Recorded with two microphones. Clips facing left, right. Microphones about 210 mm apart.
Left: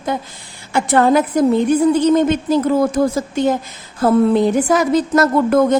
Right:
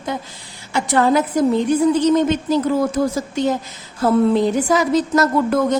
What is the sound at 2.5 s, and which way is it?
A woman's voice, 55° left (ahead or behind).